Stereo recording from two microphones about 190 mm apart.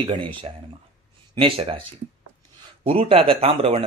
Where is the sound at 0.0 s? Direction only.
30° right (ahead or behind).